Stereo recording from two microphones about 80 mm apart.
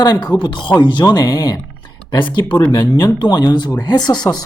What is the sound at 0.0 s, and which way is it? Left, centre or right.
Speech, left.